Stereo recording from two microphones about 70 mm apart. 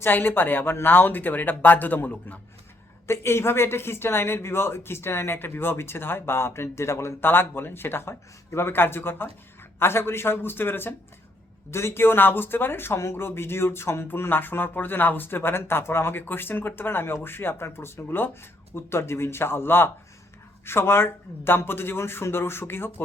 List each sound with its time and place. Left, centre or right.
0.0 s speech: left
3.1 s speech: left